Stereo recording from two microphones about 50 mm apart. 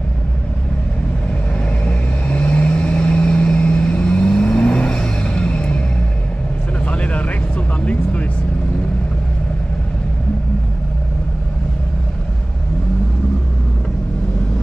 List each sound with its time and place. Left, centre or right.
1.9 s vehicle: left
6.8 s vehicle: left